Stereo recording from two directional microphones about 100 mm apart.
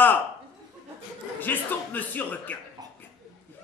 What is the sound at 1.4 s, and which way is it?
Speech, 20° left (ahead or behind).